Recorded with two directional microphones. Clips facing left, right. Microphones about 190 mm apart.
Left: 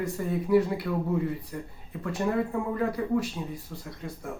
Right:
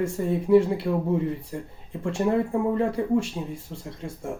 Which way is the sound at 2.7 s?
25° right (ahead or behind).